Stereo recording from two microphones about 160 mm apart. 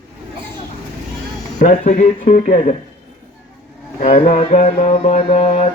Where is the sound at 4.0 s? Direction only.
40° left (ahead or behind).